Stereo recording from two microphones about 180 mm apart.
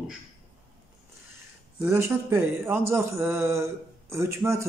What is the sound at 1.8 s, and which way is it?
Mantra, 15° right (ahead or behind).